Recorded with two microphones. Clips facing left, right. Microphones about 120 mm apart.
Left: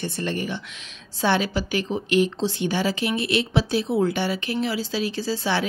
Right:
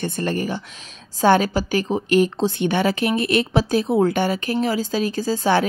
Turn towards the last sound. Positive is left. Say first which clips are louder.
# right 6 dB
turn(degrees=-50)  # may be behind; listen again after turning